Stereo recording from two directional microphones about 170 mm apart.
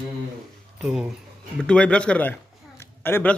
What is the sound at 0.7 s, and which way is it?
A man's voice, 5° right (ahead or behind).